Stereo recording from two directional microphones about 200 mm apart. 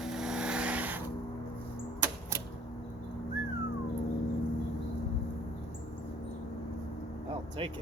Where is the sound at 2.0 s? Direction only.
10° right (ahead or behind).